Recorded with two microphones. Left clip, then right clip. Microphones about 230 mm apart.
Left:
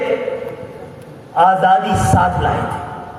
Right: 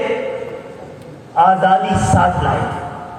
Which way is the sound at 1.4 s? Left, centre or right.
Left.